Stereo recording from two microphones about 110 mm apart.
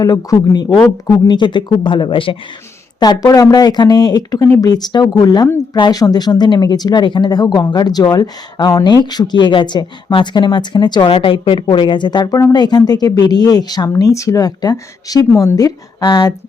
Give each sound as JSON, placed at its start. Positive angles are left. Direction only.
{"t": 0.0, "sound": "speech", "side_deg": 35}
{"t": 3.0, "sound": "speech", "side_deg": 35}